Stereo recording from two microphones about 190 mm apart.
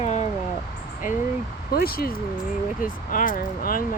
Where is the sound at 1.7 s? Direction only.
55° left (ahead or behind).